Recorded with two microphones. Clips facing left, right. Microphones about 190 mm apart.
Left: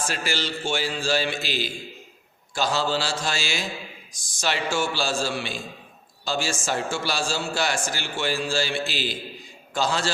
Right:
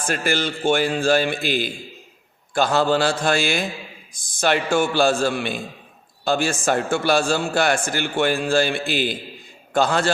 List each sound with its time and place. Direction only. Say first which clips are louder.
0.0 s a man's voice: right 6 dB; 55° right (ahead or behind)